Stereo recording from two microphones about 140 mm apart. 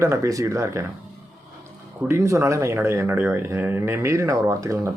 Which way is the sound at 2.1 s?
20° right (ahead or behind).